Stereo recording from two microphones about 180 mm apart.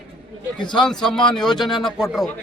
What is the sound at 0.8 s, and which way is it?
Speech, 5° left (ahead or behind).